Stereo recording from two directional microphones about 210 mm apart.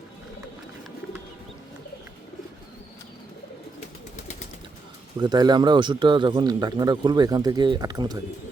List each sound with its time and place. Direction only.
5.2 s speech: 20° right (ahead or behind)